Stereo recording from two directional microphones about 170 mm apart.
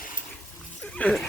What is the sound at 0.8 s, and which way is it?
Dog, 5° left (ahead or behind).